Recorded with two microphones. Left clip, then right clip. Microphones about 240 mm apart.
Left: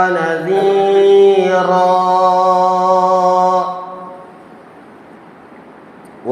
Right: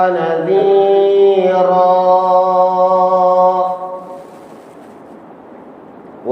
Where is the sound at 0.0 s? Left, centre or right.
Left.